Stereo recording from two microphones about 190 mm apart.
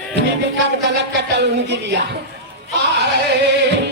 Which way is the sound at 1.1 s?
60° right (ahead or behind).